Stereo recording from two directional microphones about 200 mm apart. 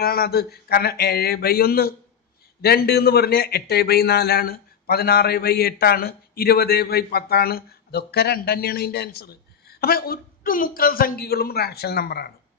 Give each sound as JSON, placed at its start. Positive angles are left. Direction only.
{"t": 0.0, "sound": "a man's voice", "side_deg": 50}